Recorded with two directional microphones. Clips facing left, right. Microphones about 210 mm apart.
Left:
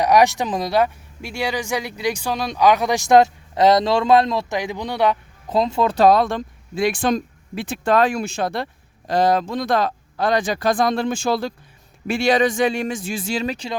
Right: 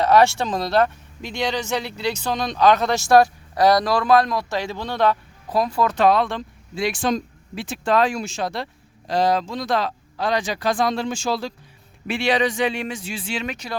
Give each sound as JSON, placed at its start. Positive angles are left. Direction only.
{"t": 0.0, "sound": "speech", "side_deg": 15}
{"t": 6.0, "sound": "speech", "side_deg": 40}
{"t": 12.0, "sound": "speech", "side_deg": 45}